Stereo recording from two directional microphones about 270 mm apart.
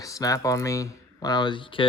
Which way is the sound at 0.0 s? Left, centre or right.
Centre.